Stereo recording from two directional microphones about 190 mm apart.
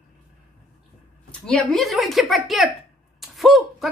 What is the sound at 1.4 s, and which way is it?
Speech, 5° left (ahead or behind).